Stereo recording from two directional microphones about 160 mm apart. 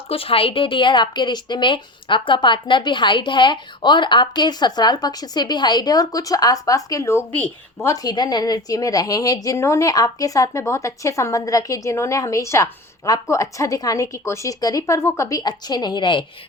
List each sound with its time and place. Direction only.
0.1 s a woman's voice: 35° left (ahead or behind)